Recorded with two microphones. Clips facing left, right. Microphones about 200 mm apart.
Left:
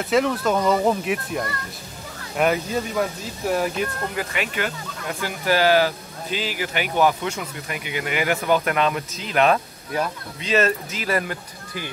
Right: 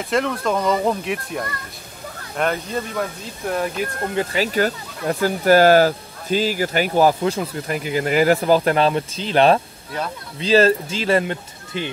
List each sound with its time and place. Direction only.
0.0 s speech: centre (ahead or behind)
4.1 s speech: 30° right (ahead or behind)